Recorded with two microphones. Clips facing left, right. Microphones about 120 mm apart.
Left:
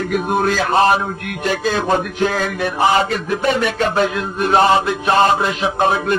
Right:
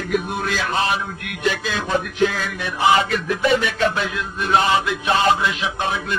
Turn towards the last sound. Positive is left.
turn(degrees=45)  # may be behind; listen again after turning